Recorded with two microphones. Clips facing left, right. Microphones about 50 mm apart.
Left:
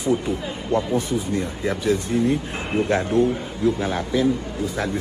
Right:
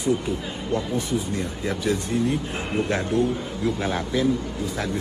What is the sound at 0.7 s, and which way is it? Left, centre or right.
A man's voice, left.